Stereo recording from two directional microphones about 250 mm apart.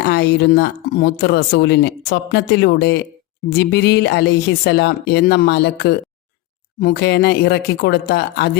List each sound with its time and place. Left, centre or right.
0.0 s speech: left